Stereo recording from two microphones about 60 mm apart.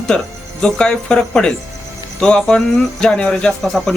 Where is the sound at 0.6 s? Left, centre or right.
Centre.